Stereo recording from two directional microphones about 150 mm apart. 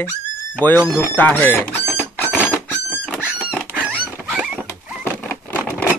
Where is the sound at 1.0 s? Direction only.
15° left (ahead or behind).